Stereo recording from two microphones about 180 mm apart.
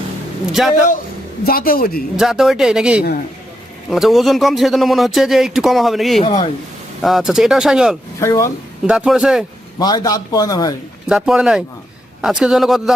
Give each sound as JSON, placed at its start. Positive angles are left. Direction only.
{"t": 0.6, "sound": "speech", "side_deg": -5}
{"t": 1.5, "sound": "a woman's voice", "side_deg": 55}
{"t": 2.1, "sound": "speech", "side_deg": 0}
{"t": 6.2, "sound": "speech", "side_deg": 30}
{"t": 7.0, "sound": "speech", "side_deg": 0}
{"t": 8.2, "sound": "speech", "side_deg": 15}
{"t": 8.9, "sound": "speech", "side_deg": -5}
{"t": 9.7, "sound": "a man's voice", "side_deg": 20}
{"t": 11.0, "sound": "speech", "side_deg": -5}